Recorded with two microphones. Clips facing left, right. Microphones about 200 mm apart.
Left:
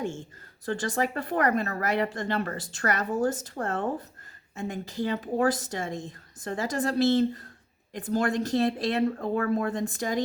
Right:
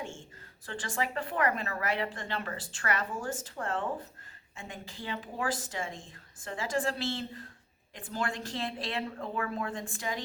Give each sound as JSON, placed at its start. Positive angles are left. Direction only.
{"t": 0.6, "sound": "a woman's voice", "side_deg": 40}